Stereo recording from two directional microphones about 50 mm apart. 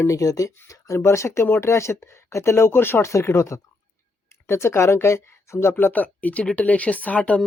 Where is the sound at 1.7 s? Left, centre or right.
Left.